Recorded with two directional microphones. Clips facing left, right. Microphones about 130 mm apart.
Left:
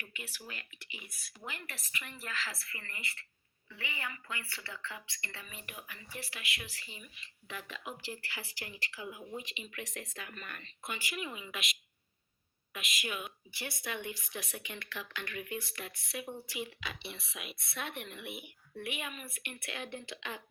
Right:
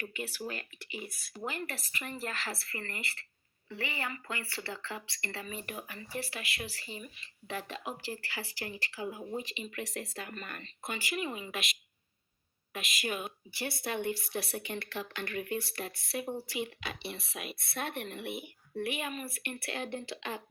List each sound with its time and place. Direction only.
0.0 s speech: 40° right (ahead or behind)
2.3 s speech: 60° right (ahead or behind)
2.6 s speech: 40° right (ahead or behind)
12.7 s speech: 35° right (ahead or behind)
16.6 s speech: 45° right (ahead or behind)